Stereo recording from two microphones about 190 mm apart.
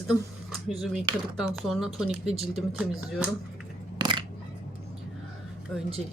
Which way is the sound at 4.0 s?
25° right (ahead or behind).